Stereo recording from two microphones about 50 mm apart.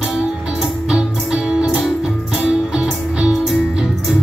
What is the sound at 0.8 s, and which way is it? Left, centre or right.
Music, centre.